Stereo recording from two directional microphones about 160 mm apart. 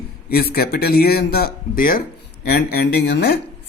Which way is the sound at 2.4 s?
85° left.